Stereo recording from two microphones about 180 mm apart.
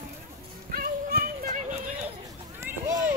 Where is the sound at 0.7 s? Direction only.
55° right (ahead or behind).